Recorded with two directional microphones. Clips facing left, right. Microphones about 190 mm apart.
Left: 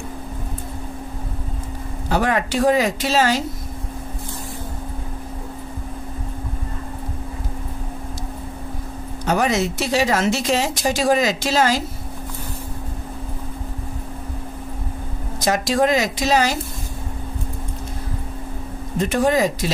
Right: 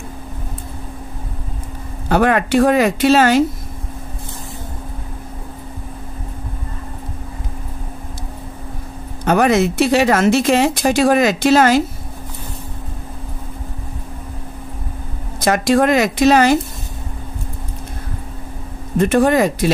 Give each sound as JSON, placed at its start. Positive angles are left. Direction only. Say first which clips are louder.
{"t": 2.0, "sound": "speech", "louder": "right 5 dB", "side_deg": -60}
{"t": 9.2, "sound": "speech", "louder": "right 6 dB", "side_deg": -60}
{"t": 15.4, "sound": "speech", "louder": "right 4 dB", "side_deg": -60}
{"t": 18.9, "sound": "speech", "louder": "right 5 dB", "side_deg": -60}